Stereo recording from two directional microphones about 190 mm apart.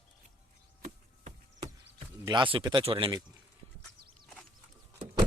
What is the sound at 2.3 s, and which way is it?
Speech, 25° right (ahead or behind).